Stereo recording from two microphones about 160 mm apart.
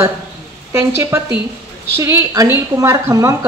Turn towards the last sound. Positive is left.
turn(degrees=-20)  # may be behind; listen again after turning